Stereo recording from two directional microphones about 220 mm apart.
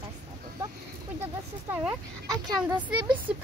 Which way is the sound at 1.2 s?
10° right (ahead or behind).